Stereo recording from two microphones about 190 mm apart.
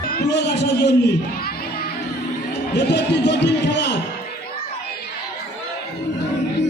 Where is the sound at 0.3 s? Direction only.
65° left (ahead or behind).